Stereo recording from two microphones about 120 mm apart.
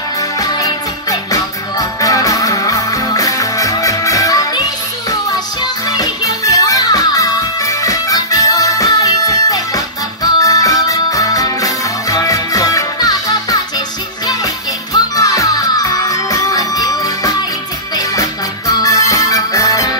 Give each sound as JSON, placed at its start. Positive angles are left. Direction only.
{"t": 0.2, "sound": "music", "side_deg": 30}
{"t": 5.9, "sound": "music", "side_deg": 30}
{"t": 18.7, "sound": "music", "side_deg": 30}